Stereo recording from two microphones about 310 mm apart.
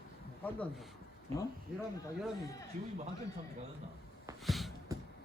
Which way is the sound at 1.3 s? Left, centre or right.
Centre.